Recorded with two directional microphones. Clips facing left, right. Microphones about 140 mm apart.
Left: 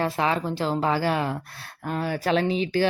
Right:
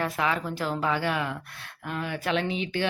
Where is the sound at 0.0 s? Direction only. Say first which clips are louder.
Left 3 dB; 30° left (ahead or behind).